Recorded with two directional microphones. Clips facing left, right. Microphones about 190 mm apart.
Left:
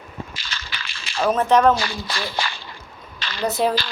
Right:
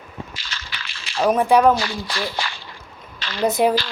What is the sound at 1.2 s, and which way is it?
Speech, 15° right (ahead or behind).